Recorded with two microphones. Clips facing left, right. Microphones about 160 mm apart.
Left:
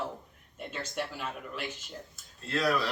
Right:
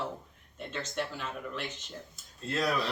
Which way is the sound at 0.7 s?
10° left (ahead or behind).